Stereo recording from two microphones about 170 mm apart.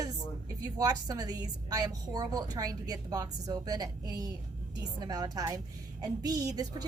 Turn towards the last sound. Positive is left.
turn(degrees=-20)  # may be behind; listen again after turning